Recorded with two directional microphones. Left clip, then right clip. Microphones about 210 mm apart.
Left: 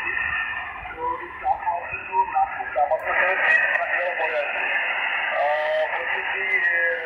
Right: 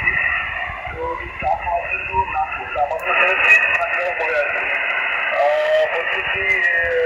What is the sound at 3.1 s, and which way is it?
Radio, 20° right (ahead or behind).